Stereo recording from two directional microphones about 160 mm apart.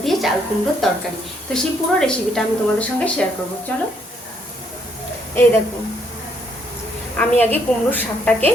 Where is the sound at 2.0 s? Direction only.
5° left (ahead or behind).